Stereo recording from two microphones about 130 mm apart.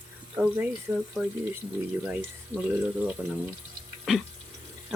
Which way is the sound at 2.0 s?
10° right (ahead or behind).